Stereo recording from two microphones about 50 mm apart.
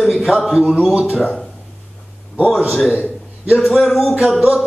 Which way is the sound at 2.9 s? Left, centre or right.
Right.